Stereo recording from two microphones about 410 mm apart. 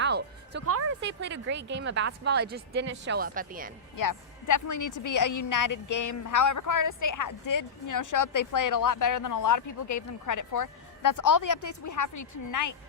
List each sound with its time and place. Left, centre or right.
0.0 s speech: right
3.9 s a woman's voice: left